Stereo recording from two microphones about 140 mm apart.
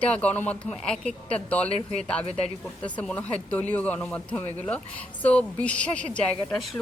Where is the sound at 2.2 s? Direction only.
50° left (ahead or behind).